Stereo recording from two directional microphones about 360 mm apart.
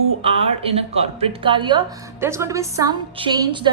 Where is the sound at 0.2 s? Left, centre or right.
Centre.